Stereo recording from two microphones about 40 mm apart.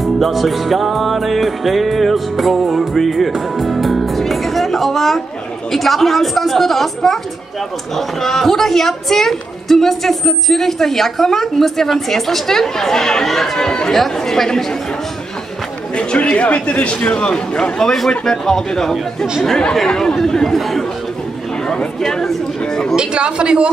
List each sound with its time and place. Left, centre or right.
0.0 s music: centre
3.3 s speech: centre
5.7 s music: centre
7.9 s a woman's voice: centre
16.0 s a man's voice: left
22.1 s a woman's voice: centre
22.9 s speech: right